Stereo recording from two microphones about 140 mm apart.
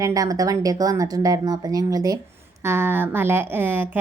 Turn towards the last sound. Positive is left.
turn(degrees=-15)  # may be behind; listen again after turning